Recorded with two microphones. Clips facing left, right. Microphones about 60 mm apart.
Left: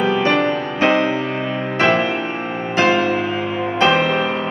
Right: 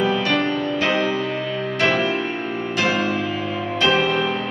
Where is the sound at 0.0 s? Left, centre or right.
Left.